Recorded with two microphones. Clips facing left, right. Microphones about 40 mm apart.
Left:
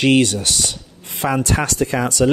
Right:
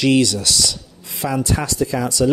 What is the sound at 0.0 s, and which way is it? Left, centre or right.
Speech, left.